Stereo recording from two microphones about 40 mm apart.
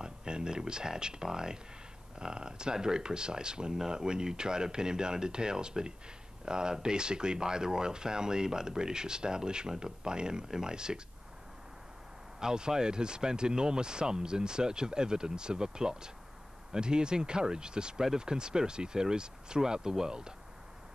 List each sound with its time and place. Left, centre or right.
0.0 s speech: right
12.4 s speech: centre